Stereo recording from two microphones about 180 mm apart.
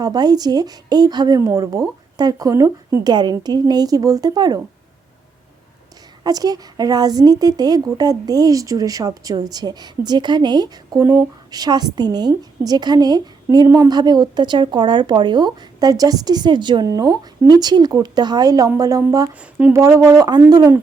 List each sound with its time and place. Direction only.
0.0 s speech: 20° right (ahead or behind)
6.2 s speech: 20° right (ahead or behind)
19.3 s speech: 10° right (ahead or behind)